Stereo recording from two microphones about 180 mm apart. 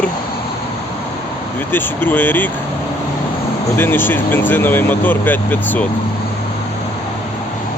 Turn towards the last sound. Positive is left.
turn(degrees=10)  # may be behind; listen again after turning